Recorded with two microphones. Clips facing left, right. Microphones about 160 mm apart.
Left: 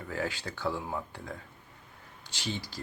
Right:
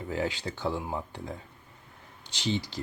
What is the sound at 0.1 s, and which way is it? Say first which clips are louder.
Speech: right 3 dB; 20° right (ahead or behind).